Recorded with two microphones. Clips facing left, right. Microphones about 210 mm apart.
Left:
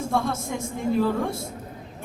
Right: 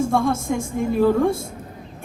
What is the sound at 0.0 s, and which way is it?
A woman's voice, 50° right (ahead or behind).